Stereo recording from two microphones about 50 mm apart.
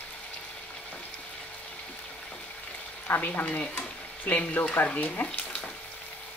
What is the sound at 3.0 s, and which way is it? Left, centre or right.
Speech, left.